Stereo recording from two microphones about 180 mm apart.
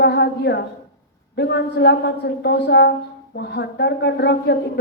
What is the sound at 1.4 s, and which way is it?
A woman's voice, 70° left (ahead or behind).